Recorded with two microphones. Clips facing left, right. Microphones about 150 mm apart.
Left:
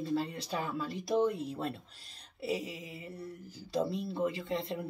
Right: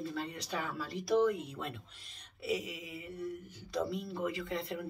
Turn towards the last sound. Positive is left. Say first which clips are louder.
# left 2 dB
turn(degrees=25)  # may be behind; listen again after turning